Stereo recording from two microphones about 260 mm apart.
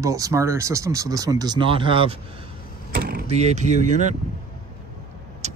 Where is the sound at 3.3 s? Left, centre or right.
Right.